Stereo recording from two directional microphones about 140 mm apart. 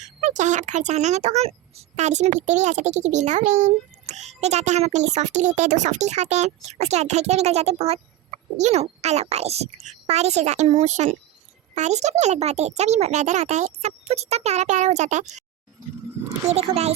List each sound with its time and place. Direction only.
0.0 s a child's voice: 55° right (ahead or behind)
16.5 s a child's voice: 50° right (ahead or behind)